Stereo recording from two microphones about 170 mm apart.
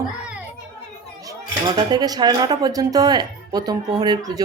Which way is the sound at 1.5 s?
25° right (ahead or behind).